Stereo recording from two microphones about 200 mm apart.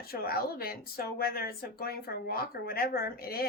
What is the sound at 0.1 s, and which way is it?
Speech, 50° left (ahead or behind).